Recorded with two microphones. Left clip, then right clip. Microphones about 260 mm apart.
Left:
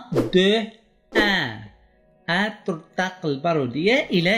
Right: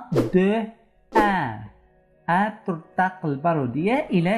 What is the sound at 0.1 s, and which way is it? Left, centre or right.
Speech, centre.